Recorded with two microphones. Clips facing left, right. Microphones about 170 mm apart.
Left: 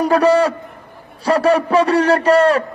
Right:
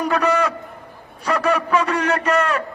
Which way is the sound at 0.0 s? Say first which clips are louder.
Left 6 dB; 30° left (ahead or behind).